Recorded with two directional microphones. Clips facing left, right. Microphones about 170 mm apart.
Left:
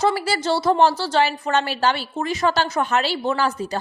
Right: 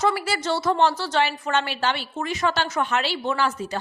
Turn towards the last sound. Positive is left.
turn(degrees=35)  # may be behind; listen again after turning